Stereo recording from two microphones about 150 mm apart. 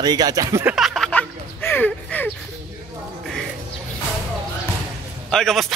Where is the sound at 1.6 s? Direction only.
15° left (ahead or behind).